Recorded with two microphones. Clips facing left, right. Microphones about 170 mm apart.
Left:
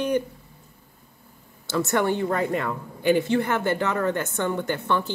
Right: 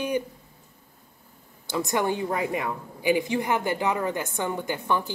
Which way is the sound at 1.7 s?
15° right (ahead or behind).